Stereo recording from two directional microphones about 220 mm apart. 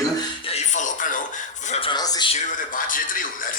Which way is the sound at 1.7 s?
20° left (ahead or behind).